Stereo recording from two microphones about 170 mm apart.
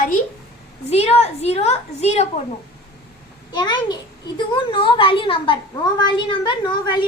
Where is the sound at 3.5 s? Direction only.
25° left (ahead or behind).